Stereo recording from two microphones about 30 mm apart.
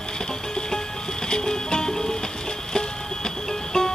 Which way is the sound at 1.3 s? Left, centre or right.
Left.